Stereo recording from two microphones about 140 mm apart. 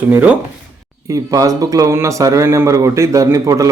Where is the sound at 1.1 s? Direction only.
25° right (ahead or behind).